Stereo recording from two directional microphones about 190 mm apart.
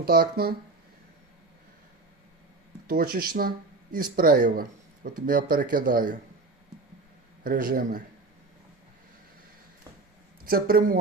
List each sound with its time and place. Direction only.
0.0 s speech: 50° right (ahead or behind)
2.8 s speech: 50° right (ahead or behind)
7.4 s speech: 50° right (ahead or behind)
10.4 s speech: 50° right (ahead or behind)